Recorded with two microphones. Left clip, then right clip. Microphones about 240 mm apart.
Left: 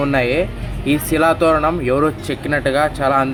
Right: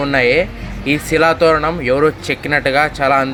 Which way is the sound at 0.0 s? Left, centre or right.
Right.